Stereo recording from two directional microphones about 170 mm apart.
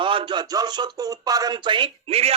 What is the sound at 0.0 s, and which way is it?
Speech, 30° right (ahead or behind).